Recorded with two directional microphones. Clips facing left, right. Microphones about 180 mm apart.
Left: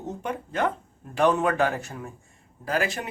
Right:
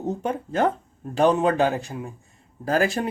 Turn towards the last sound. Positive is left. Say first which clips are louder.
# right 5 dB
turn(degrees=-40)  # may be behind; listen again after turning